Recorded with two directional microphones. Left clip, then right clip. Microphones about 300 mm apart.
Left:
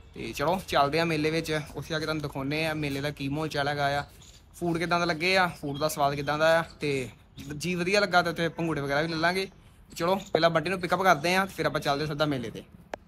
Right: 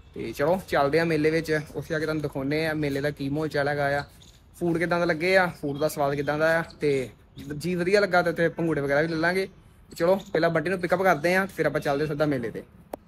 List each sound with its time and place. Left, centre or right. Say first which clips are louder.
0.7 s speech: right 2 dB; centre